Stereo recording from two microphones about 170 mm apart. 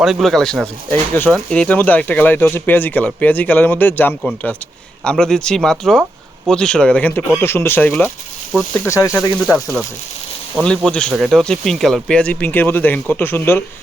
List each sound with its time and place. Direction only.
0.0 s speech: centre (ahead or behind); by 9.6 s 15° left (ahead or behind)
10.6 s speech: 5° left (ahead or behind)